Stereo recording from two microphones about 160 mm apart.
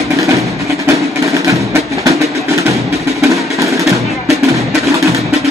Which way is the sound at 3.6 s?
20° right (ahead or behind).